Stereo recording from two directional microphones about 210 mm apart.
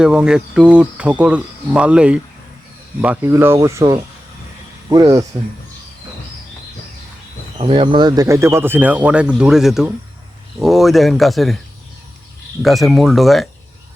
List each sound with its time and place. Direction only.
0.0 s speech: 5° right (ahead or behind)
7.6 s speech: 25° right (ahead or behind); by 11.5 s centre (ahead or behind)
12.6 s speech: centre (ahead or behind)